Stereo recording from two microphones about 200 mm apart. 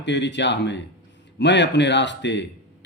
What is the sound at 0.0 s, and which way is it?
A man's voice, 65° left (ahead or behind).